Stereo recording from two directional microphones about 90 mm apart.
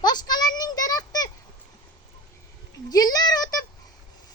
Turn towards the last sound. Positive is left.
turn(degrees=45)  # may be behind; listen again after turning